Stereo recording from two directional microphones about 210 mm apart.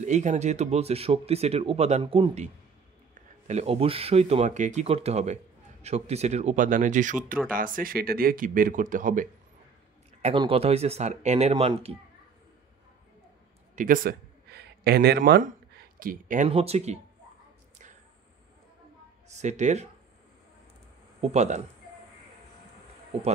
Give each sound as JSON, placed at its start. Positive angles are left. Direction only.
{"t": 0.0, "sound": "speech", "side_deg": -35}
{"t": 10.3, "sound": "speech", "side_deg": -25}
{"t": 13.7, "sound": "a sound", "side_deg": -40}
{"t": 16.4, "sound": "speech", "side_deg": -30}
{"t": 19.3, "sound": "speech", "side_deg": -35}
{"t": 21.2, "sound": "speech", "side_deg": -30}